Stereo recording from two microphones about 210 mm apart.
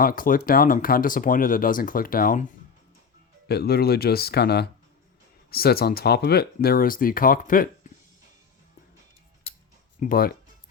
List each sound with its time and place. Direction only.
0.0 s speech: 40° left (ahead or behind)
3.5 s speech: 50° left (ahead or behind)
10.0 s speech: 45° left (ahead or behind)